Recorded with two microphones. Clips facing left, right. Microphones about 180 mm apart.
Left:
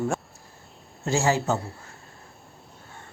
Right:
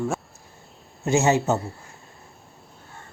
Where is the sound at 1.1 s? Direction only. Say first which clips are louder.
Right 3 dB; 20° right (ahead or behind).